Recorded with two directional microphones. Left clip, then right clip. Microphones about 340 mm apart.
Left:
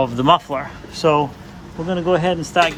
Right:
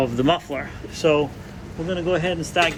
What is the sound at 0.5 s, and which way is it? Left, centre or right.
Speech, centre.